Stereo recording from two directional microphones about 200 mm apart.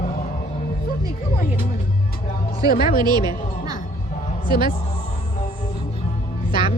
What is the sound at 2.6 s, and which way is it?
Speech, 45° left (ahead or behind).